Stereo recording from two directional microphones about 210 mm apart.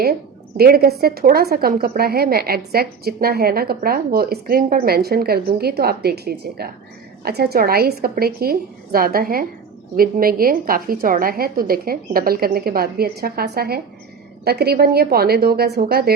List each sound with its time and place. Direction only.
0.0 s a woman's voice: 45° right (ahead or behind)